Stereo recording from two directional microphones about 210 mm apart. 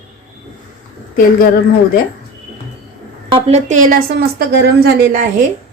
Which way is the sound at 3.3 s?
30° right (ahead or behind).